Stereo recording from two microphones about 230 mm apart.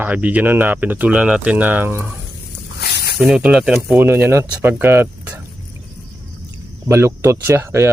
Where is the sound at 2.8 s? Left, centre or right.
Left.